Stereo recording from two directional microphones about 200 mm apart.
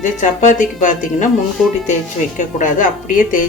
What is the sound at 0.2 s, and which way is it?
A woman's voice, 40° left (ahead or behind).